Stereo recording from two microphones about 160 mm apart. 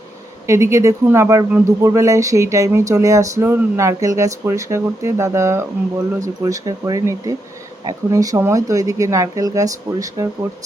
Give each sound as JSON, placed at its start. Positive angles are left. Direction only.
{"t": 0.4, "sound": "speech", "side_deg": -20}